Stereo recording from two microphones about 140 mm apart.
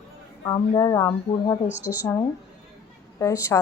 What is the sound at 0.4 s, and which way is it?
Speech, 30° left (ahead or behind).